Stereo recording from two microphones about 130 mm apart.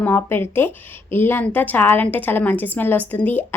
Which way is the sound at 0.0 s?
15° left (ahead or behind).